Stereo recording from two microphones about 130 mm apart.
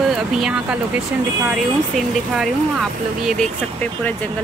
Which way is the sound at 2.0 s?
Centre (ahead or behind).